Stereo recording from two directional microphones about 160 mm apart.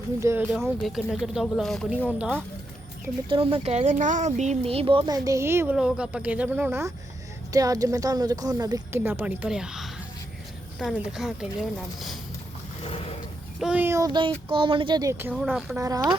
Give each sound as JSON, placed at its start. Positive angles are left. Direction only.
{"t": 0.2, "sound": "speech", "side_deg": -15}
{"t": 0.4, "sound": "speech", "side_deg": 0}
{"t": 3.2, "sound": "speech", "side_deg": -35}
{"t": 12.8, "sound": "a sound", "side_deg": 40}
{"t": 13.6, "sound": "speech", "side_deg": -10}
{"t": 15.4, "sound": "speech", "side_deg": 0}
{"t": 15.8, "sound": "speech", "side_deg": -20}